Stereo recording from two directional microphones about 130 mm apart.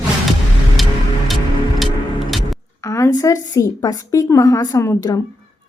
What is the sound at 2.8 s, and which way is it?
A woman's voice, 25° left (ahead or behind).